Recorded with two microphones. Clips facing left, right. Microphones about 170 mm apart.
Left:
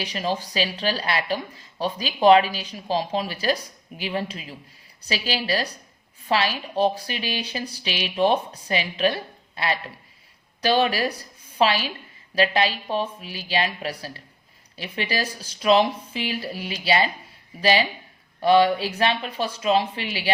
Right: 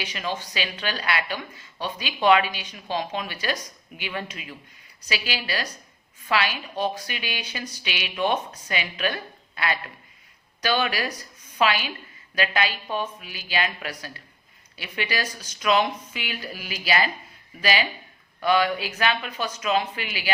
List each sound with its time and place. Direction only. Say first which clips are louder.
0.0 s a woman's voice: left 4 dB; 35° left (ahead or behind)